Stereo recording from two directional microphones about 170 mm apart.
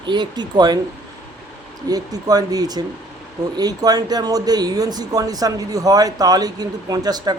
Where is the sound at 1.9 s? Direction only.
20° right (ahead or behind).